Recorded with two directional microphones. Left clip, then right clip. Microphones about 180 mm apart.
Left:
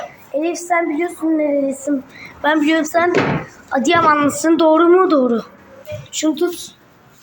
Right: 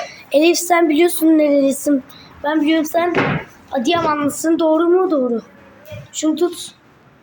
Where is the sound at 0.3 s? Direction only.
40° right (ahead or behind).